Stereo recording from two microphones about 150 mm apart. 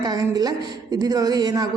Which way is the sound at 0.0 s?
25° right (ahead or behind).